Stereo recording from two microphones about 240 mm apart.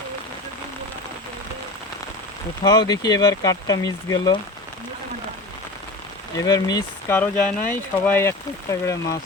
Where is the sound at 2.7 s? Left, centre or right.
Centre.